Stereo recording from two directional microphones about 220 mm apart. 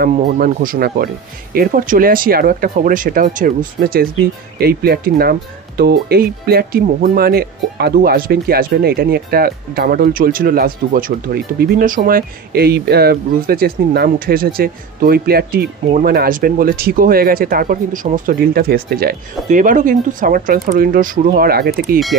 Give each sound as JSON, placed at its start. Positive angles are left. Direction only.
{"t": 0.0, "sound": "speech", "side_deg": -40}